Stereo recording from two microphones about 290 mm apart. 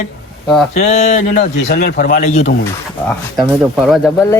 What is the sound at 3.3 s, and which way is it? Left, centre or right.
Speech, centre.